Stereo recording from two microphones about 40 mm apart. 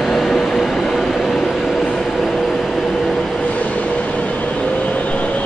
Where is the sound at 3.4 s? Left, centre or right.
Left.